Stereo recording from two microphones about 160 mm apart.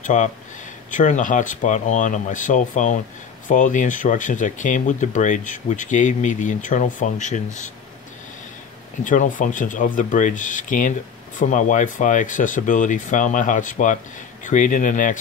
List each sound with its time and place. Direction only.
0.0 s speech: 50° left (ahead or behind)
9.0 s speech: 55° left (ahead or behind)